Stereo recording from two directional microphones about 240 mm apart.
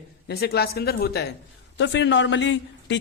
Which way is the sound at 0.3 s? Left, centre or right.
Left.